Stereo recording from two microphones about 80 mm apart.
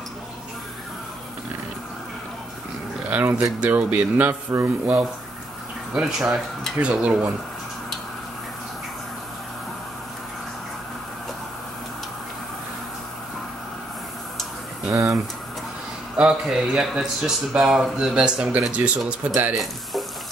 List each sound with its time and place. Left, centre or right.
3.1 s speech: right
5.9 s speech: centre
14.9 s speech: right
16.2 s speech: centre
19.5 s speech: centre